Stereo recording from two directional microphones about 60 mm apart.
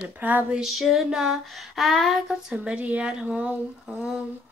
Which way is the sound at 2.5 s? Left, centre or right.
Right.